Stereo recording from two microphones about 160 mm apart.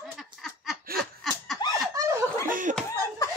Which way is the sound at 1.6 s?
30° left (ahead or behind).